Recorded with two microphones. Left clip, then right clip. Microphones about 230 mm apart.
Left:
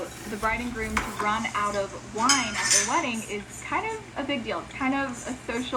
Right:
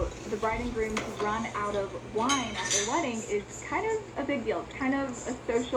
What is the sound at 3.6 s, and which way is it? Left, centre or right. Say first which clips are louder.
A woman's voice: left 3 dB; left.